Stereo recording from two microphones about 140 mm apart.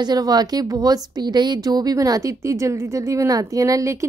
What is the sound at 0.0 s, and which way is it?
Speech, 30° right (ahead or behind).